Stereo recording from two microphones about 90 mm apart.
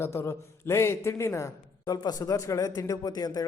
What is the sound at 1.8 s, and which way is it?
A man's voice, 45° left (ahead or behind).